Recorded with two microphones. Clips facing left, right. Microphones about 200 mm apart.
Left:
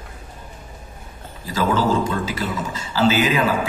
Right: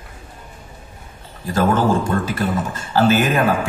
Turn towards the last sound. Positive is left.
turn(degrees=-55)  # may be behind; listen again after turning